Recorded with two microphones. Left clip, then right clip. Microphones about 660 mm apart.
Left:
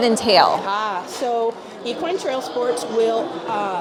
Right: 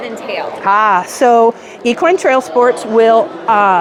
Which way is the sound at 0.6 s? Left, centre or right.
Right.